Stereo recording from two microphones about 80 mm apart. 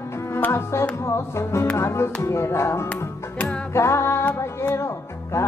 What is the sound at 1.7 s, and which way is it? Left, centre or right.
Speech, left.